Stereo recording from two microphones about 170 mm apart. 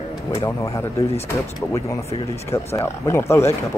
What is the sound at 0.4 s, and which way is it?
Speech, 20° left (ahead or behind).